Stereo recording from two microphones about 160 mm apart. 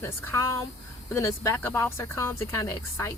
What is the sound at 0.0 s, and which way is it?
Speech, 15° left (ahead or behind).